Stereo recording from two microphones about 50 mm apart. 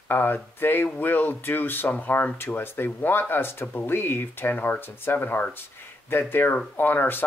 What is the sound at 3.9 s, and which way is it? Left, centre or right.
Speech, left.